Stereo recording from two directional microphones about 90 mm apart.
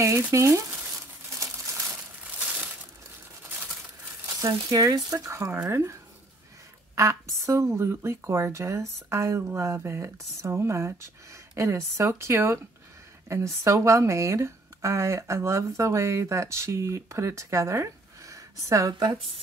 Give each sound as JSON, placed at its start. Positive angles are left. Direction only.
{"t": 0.3, "sound": "crumpling", "side_deg": -35}
{"t": 2.3, "sound": "crushing", "side_deg": -15}
{"t": 4.6, "sound": "speech", "side_deg": -45}
{"t": 7.0, "sound": "speech", "side_deg": -35}